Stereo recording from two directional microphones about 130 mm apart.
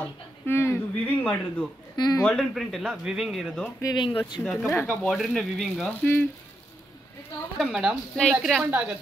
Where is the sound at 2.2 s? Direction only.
Centre (ahead or behind).